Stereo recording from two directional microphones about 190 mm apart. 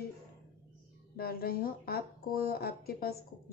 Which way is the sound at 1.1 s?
55° left (ahead or behind).